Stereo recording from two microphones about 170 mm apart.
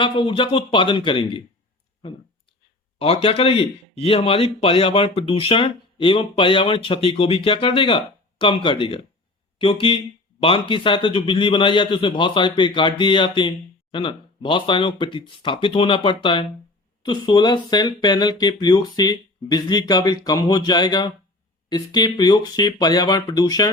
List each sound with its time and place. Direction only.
0.0 s a man's voice: 30° left (ahead or behind)
3.0 s a man's voice: 35° left (ahead or behind)